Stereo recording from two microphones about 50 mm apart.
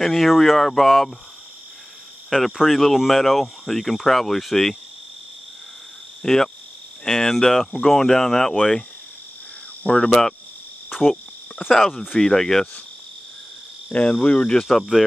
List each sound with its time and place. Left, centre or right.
0.0 s speech: centre
2.2 s speech: centre
6.2 s speech: centre
9.8 s speech: centre
10.9 s cricket: centre
12.2 s speech: centre
14.1 s speech: left
14.6 s speech: centre